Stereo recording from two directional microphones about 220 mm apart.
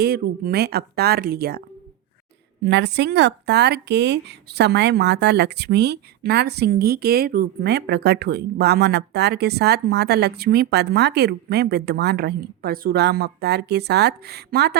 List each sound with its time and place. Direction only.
0.0 s speech: 45° right (ahead or behind)
2.6 s speech: 50° right (ahead or behind)